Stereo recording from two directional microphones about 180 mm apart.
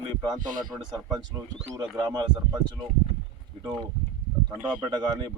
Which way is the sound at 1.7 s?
20° right (ahead or behind).